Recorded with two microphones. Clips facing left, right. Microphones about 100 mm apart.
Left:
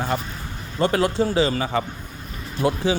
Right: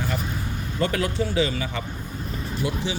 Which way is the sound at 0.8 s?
30° left (ahead or behind).